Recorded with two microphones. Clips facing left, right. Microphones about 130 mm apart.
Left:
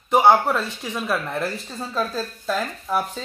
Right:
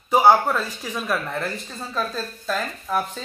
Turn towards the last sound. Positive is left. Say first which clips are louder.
# left 1 dB
turn(degrees=5)  # may be behind; listen again after turning